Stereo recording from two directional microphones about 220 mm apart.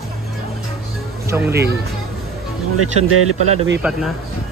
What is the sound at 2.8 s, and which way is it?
Speech, 75° right (ahead or behind).